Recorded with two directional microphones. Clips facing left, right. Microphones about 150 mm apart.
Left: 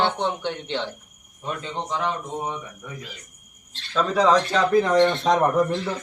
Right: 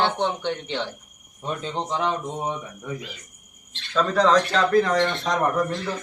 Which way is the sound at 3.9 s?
5° left (ahead or behind).